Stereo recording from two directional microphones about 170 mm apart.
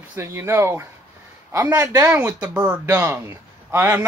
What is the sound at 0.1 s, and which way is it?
Speech, 15° right (ahead or behind).